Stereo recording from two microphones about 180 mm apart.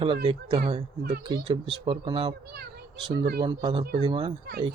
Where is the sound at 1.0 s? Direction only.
60° right (ahead or behind).